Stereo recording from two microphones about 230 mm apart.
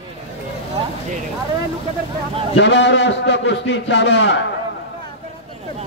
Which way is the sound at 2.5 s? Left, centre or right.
Left.